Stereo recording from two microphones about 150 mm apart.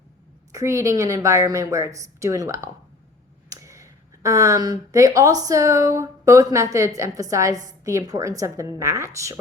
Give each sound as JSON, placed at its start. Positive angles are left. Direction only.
{"t": 0.5, "sound": "speech", "side_deg": -20}